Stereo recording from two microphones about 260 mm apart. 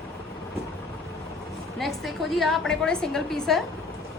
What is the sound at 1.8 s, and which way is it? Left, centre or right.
A woman's voice, centre.